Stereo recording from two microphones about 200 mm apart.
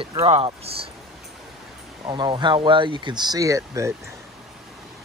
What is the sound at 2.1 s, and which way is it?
Speech, 25° right (ahead or behind).